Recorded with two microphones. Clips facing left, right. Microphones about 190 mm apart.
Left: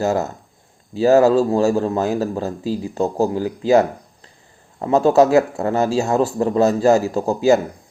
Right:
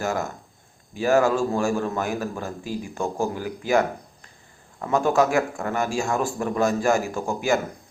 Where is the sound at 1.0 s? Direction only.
35° left (ahead or behind).